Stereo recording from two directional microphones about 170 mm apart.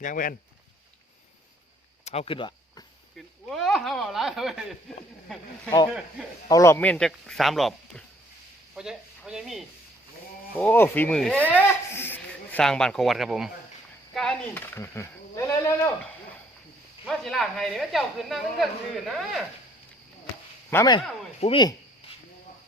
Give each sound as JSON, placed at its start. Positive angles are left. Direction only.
{"t": 0.0, "sound": "speech", "side_deg": 55}
{"t": 2.0, "sound": "speech", "side_deg": 35}
{"t": 3.2, "sound": "speech", "side_deg": 0}
{"t": 6.5, "sound": "speech", "side_deg": 15}
{"t": 10.6, "sound": "speech", "side_deg": 10}
{"t": 17.1, "sound": "speech", "side_deg": 0}
{"t": 20.7, "sound": "speech", "side_deg": 15}
{"t": 21.4, "sound": "speech", "side_deg": 25}